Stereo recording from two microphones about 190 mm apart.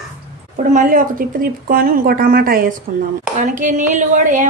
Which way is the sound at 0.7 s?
45° right (ahead or behind).